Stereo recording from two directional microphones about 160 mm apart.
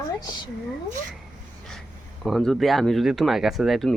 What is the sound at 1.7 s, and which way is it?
Speech, centre (ahead or behind).